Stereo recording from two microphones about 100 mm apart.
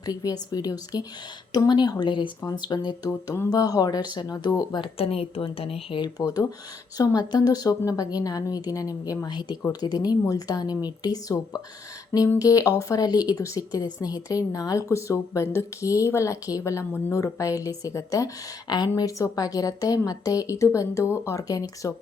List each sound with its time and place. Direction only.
0.0 s a woman's voice: 40° left (ahead or behind)
2.4 s a woman's voice: 40° left (ahead or behind)
4.9 s a woman's voice: 75° left (ahead or behind)
6.0 s a woman's voice: 40° left (ahead or behind)